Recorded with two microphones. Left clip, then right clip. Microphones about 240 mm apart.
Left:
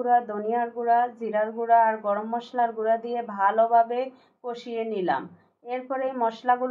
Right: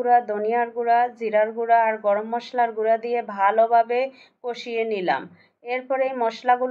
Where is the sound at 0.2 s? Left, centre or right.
Right.